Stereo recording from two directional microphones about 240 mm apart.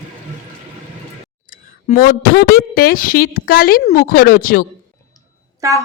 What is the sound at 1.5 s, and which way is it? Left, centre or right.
Speech, left.